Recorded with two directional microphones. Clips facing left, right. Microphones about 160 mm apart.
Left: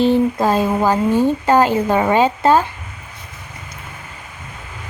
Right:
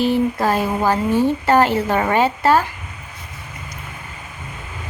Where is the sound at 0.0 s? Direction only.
20° left (ahead or behind).